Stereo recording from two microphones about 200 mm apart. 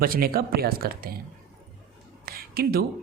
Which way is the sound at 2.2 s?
50° right (ahead or behind).